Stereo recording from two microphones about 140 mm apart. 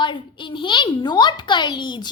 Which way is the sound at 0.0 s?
35° left (ahead or behind).